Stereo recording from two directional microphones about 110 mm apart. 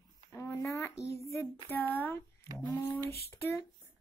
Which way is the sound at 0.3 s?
20° left (ahead or behind).